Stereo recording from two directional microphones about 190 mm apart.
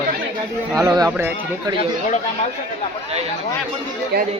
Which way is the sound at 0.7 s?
20° right (ahead or behind).